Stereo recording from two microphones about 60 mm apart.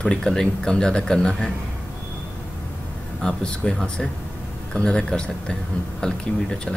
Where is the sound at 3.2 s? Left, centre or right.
Centre.